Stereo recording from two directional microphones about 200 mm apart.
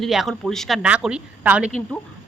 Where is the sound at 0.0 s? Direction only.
Centre (ahead or behind).